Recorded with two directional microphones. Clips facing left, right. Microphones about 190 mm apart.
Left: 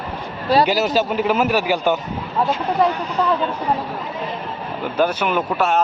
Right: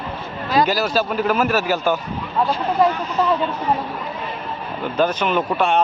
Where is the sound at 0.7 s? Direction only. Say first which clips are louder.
Left 2 dB; 20° left (ahead or behind).